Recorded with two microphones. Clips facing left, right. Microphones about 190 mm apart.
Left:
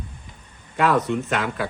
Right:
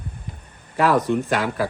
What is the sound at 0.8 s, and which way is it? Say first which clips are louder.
Speech: right 2 dB; 35° right (ahead or behind).